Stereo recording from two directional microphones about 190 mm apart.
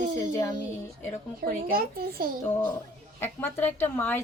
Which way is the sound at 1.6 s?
50° right (ahead or behind).